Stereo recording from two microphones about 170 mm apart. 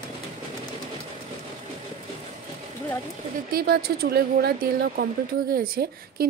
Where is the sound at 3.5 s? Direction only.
65° right (ahead or behind).